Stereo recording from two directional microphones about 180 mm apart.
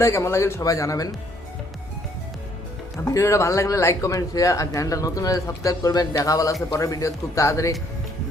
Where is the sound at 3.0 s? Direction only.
15° left (ahead or behind).